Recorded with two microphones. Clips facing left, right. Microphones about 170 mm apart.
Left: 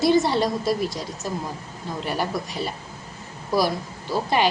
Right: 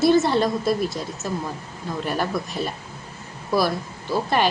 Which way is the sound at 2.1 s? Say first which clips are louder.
Right 1 dB; 15° left (ahead or behind).